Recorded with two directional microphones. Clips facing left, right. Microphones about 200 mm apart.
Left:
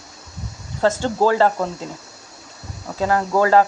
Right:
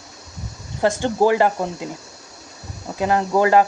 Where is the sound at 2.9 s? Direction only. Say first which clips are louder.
Even; 20° right (ahead or behind).